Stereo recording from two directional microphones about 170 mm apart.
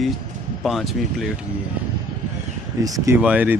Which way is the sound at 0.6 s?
Centre (ahead or behind).